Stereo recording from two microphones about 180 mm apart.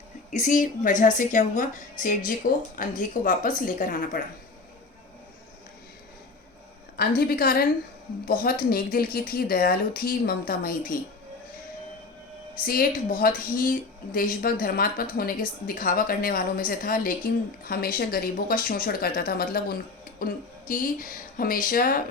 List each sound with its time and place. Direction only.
0.3 s a woman's voice: 45° left (ahead or behind)
7.2 s speech: 55° left (ahead or behind)
12.5 s a woman's voice: 55° left (ahead or behind)